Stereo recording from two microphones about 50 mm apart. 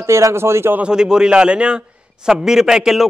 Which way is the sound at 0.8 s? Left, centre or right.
Centre.